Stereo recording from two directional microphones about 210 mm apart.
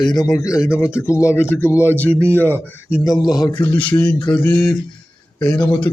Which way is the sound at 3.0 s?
20° left (ahead or behind).